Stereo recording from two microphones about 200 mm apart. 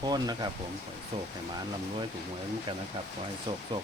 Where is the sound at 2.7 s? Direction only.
25° right (ahead or behind).